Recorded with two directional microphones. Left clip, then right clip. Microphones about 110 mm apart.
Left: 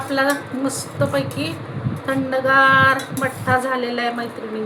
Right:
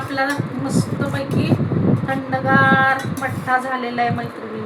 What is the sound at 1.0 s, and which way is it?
Speech, 70° left (ahead or behind).